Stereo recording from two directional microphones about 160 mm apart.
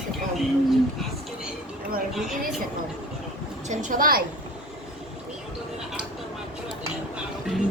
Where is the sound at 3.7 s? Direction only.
50° right (ahead or behind).